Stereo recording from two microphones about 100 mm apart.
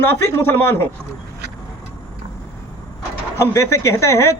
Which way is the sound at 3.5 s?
30° left (ahead or behind).